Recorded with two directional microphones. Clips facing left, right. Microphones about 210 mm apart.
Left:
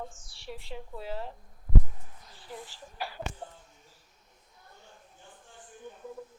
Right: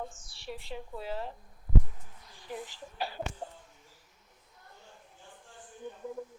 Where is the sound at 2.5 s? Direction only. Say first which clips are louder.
Right 3 dB; 15° right (ahead or behind).